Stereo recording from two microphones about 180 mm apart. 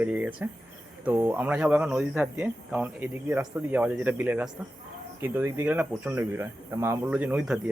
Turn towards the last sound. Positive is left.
turn(degrees=-5)  # may be behind; listen again after turning